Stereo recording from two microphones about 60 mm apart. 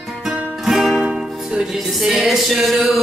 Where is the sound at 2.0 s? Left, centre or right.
Centre.